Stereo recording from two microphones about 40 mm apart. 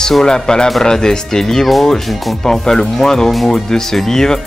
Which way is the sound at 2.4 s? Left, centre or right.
Centre.